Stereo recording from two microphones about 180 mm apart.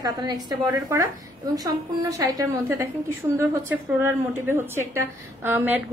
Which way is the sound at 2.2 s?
20° right (ahead or behind).